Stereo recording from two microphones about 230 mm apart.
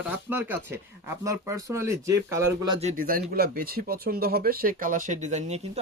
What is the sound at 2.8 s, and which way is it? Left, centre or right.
Speech, right.